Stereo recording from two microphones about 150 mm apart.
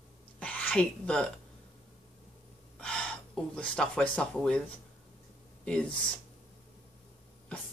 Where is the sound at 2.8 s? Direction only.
5° left (ahead or behind).